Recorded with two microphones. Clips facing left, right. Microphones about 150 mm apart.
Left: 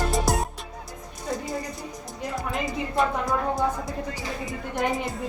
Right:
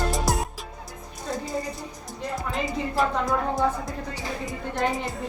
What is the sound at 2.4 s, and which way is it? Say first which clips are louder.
A woman's voice: even; centre (ahead or behind).